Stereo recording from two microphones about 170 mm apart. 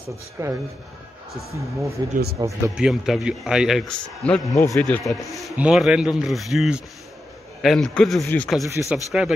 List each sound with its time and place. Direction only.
0.4 s speech: 20° right (ahead or behind)
2.0 s speech: 25° right (ahead or behind)
2.7 s a man's voice: 5° right (ahead or behind)
5.0 s a man's voice: centre (ahead or behind)